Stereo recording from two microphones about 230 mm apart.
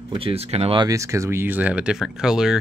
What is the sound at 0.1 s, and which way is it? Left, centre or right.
A man's voice, right.